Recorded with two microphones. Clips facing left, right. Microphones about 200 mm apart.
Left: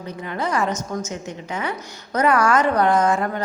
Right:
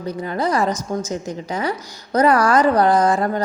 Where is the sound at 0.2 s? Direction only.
35° right (ahead or behind).